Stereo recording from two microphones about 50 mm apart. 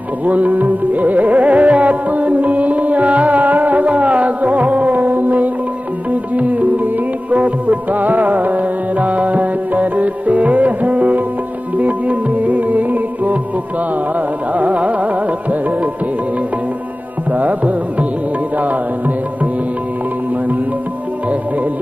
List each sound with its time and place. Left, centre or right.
0.2 s music: right
14.5 s carnatic music: right
17.3 s music: right